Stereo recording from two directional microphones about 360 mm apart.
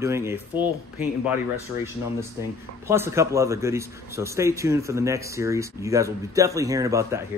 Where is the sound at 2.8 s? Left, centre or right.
Centre.